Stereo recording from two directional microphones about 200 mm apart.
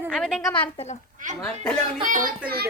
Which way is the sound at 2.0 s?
45° right (ahead or behind).